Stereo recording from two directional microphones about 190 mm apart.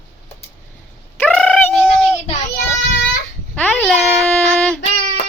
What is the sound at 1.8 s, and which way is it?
Child singing, 5° right (ahead or behind).